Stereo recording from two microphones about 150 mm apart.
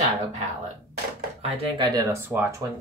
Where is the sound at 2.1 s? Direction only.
15° right (ahead or behind).